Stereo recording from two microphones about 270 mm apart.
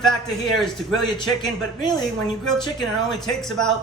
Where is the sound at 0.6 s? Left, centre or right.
Centre.